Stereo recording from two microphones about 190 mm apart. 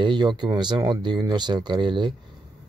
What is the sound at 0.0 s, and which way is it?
Speech, 25° right (ahead or behind).